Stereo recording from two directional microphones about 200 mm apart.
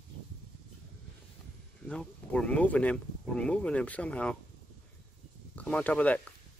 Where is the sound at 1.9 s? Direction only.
5° left (ahead or behind).